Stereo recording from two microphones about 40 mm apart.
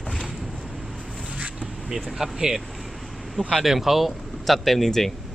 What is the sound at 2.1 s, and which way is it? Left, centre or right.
Speech, centre.